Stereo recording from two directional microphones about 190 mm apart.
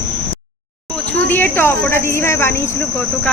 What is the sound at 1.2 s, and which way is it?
Speech, 10° left (ahead or behind).